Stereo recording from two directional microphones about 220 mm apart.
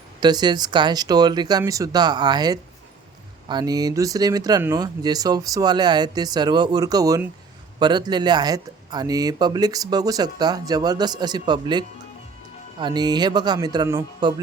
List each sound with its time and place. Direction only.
0.2 s speech: 20° right (ahead or behind)